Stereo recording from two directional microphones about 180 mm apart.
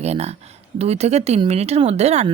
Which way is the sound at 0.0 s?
35° right (ahead or behind).